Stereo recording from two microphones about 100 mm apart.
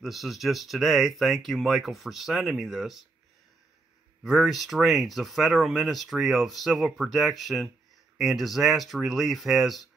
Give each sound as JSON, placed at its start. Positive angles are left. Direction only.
{"t": 0.0, "sound": "speech", "side_deg": 0}
{"t": 4.2, "sound": "speech", "side_deg": 0}